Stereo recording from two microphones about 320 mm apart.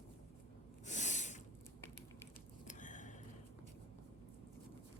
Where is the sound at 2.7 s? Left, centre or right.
Left.